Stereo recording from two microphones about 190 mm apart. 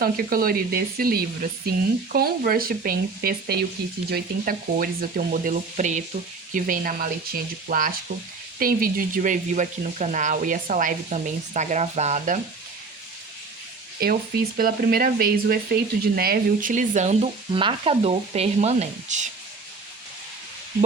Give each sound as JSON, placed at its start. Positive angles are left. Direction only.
{"t": 0.0, "sound": "speech", "side_deg": -50}
{"t": 14.0, "sound": "speech", "side_deg": -50}